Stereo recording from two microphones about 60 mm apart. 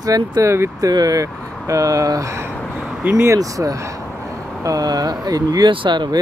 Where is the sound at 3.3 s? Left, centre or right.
Right.